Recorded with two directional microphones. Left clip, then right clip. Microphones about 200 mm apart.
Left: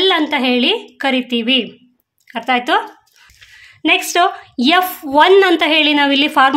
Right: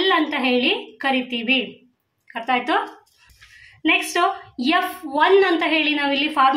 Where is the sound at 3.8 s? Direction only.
60° left (ahead or behind).